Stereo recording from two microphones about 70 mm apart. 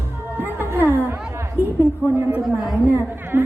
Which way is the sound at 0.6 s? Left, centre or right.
Right.